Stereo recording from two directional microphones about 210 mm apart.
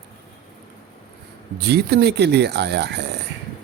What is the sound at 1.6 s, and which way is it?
Speech, 50° right (ahead or behind).